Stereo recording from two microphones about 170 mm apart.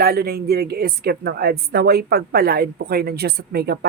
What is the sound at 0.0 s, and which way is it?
A woman's voice, 65° right (ahead or behind).